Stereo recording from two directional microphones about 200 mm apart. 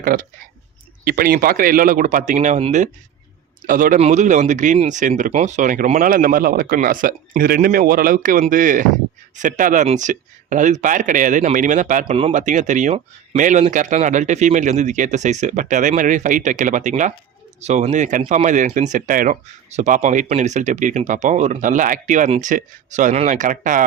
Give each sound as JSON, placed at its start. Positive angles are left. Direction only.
{"t": 0.0, "sound": "speech", "side_deg": -45}